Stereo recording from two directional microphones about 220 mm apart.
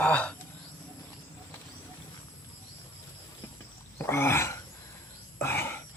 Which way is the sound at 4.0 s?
10° left (ahead or behind).